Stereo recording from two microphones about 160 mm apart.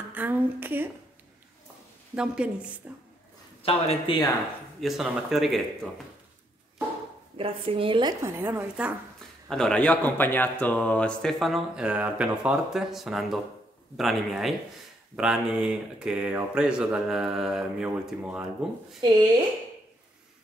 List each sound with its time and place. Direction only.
0.1 s speech: 10° right (ahead or behind)
2.1 s a woman's voice: 5° right (ahead or behind)
3.6 s speech: 40° left (ahead or behind)
4.7 s speech: centre (ahead or behind)
7.3 s speech: 35° right (ahead or behind)
8.2 s a woman's voice: 15° right (ahead or behind)
9.5 s speech: 5° left (ahead or behind)
18.9 s speech: 25° right (ahead or behind)